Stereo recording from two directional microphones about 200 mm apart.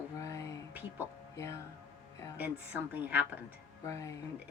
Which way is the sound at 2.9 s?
10° right (ahead or behind).